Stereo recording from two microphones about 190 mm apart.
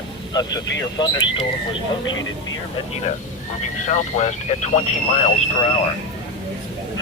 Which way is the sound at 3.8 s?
40° left (ahead or behind).